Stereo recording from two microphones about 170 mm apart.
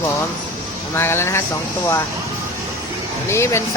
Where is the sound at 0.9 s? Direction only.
15° left (ahead or behind).